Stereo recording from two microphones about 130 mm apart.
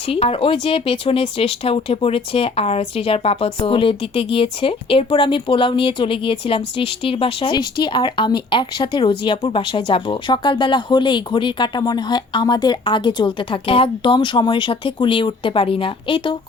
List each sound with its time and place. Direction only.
0.1 s speech: 45° left (ahead or behind)